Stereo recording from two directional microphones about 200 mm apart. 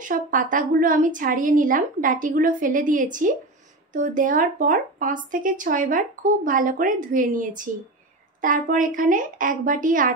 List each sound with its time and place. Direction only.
0.0 s speech: 40° right (ahead or behind)